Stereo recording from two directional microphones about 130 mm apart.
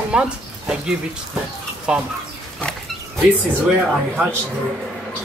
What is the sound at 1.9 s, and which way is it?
Speech, 5° right (ahead or behind).